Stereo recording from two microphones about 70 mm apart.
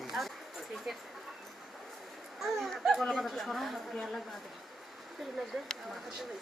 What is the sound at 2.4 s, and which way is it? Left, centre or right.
Speech, centre.